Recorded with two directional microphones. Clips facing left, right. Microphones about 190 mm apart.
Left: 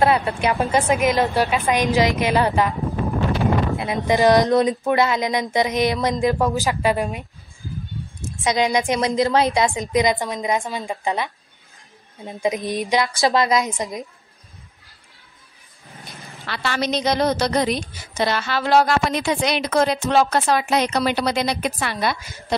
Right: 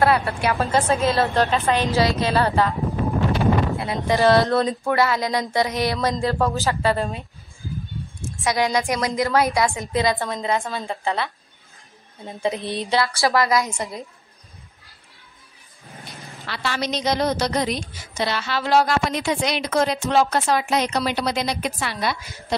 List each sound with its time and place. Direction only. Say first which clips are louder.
0.0 s a woman's voice: left 1 dB; 20° left (ahead or behind)
3.7 s a woman's voice: left 2 dB; 15° left (ahead or behind)
8.5 s a woman's voice: left 2 dB; 20° left (ahead or behind)
16.4 s a woman's voice: left 2 dB; 55° left (ahead or behind)